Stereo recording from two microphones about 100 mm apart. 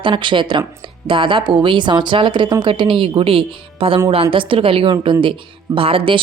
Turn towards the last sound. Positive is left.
turn(degrees=-65)  # may be behind; listen again after turning